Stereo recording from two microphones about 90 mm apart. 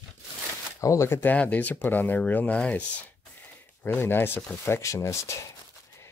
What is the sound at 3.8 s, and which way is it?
Speech, 25° left (ahead or behind).